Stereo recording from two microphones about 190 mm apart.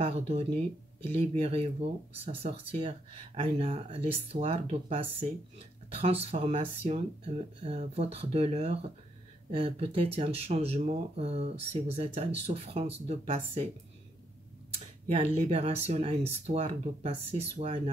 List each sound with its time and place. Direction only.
0.3 s speech: 30° right (ahead or behind)
15.0 s speech: 30° right (ahead or behind)